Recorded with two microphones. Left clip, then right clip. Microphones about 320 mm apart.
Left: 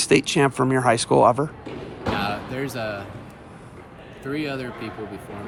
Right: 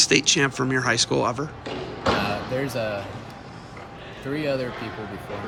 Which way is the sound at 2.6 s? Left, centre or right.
Centre.